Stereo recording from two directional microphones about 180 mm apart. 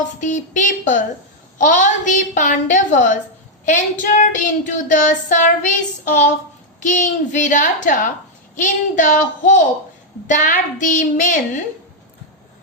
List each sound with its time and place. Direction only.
0.2 s child singing: 45° left (ahead or behind)
6.8 s child singing: 45° left (ahead or behind)